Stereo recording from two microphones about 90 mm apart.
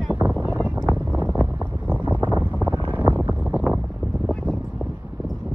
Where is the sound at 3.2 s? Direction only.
15° right (ahead or behind).